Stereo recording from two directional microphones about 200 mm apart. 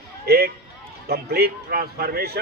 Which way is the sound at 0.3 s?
50° right (ahead or behind).